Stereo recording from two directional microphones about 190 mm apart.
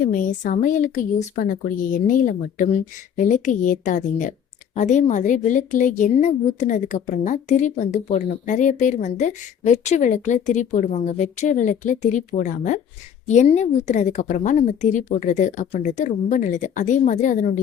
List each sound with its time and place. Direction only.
0.1 s a woman's voice: 40° left (ahead or behind)